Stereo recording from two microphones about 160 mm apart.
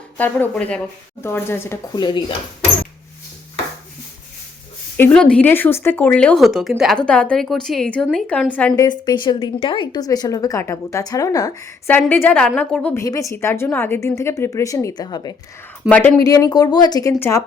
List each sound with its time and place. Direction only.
0.2 s speech: 10° left (ahead or behind)
2.0 s a woman's voice: 25° left (ahead or behind)
4.9 s speech: 10° left (ahead or behind)
8.7 s a woman's voice: 25° left (ahead or behind); by 13.0 s 10° left (ahead or behind)
13.0 s a woman's voice: 20° left (ahead or behind)
15.9 s speech: 10° left (ahead or behind)
16.2 s a woman's voice: 20° left (ahead or behind)